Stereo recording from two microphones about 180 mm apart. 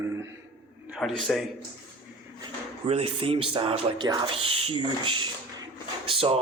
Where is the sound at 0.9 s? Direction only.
Centre (ahead or behind).